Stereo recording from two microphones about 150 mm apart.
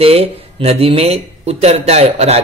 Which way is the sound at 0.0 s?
40° right (ahead or behind).